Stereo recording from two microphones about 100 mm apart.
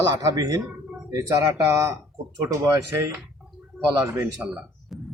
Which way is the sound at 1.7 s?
30° right (ahead or behind).